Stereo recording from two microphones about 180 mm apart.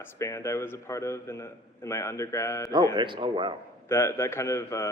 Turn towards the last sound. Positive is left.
turn(degrees=15)  # may be behind; listen again after turning